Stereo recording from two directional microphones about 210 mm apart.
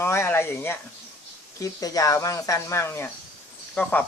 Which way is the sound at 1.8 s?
15° left (ahead or behind).